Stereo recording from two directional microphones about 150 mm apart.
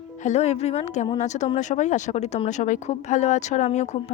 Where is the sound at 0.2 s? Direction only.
50° left (ahead or behind).